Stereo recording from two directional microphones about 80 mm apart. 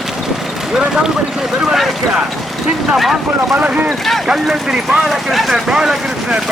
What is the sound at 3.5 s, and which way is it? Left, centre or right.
Speech, centre.